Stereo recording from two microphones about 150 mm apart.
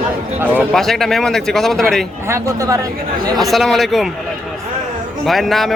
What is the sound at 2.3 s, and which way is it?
Speech, 20° right (ahead or behind).